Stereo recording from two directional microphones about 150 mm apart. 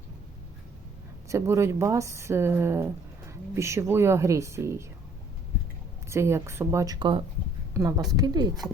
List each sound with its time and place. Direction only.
1.3 s speech: 20° right (ahead or behind)
6.1 s a woman's voice: 15° right (ahead or behind)